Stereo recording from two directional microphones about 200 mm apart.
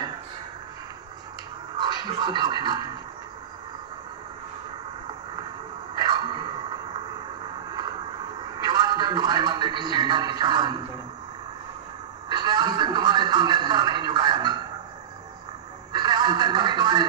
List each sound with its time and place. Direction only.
1.8 s speech: 20° right (ahead or behind)
6.0 s a sound: 20° right (ahead or behind)
8.6 s speech: 20° right (ahead or behind)
12.3 s a man's voice: 20° right (ahead or behind)
15.9 s television: 20° right (ahead or behind)